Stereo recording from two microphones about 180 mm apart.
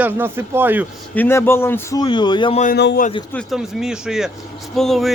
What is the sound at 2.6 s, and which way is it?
Speech, 65° left (ahead or behind).